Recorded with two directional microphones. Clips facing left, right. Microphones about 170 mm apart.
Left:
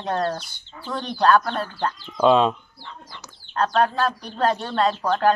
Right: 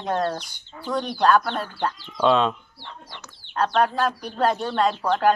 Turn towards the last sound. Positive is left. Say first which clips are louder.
# even
turn(degrees=-10)  # may be behind; listen again after turning